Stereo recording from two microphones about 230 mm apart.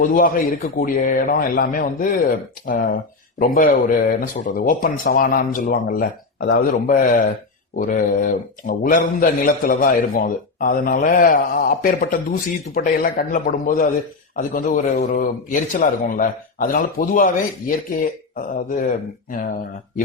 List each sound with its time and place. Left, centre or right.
0.0 s a man's voice: left
18.3 s a man's voice: left